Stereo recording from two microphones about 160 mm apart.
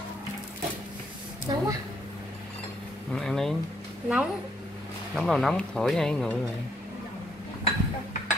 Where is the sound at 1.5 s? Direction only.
25° right (ahead or behind).